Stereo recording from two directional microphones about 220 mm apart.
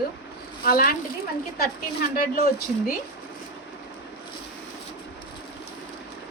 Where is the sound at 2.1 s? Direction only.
40° left (ahead or behind).